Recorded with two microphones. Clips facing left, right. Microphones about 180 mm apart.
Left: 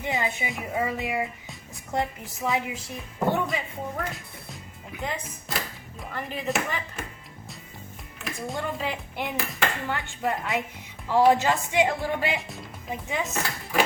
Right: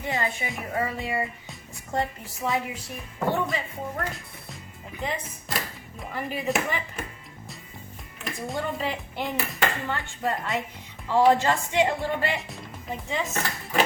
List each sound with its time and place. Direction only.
0.0 s a woman's voice: 20° left (ahead or behind)
0.5 s speech: 10° left (ahead or behind)
2.6 s speech: 15° left (ahead or behind)
3.4 s speech: centre (ahead or behind)
8.2 s speech: centre (ahead or behind)
9.9 s speech: 15° left (ahead or behind)
12.4 s speech: centre (ahead or behind)
12.9 s speech: 10° left (ahead or behind)